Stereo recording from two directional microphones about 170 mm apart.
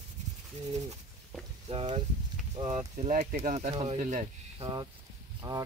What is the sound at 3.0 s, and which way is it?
Speech, 45° right (ahead or behind).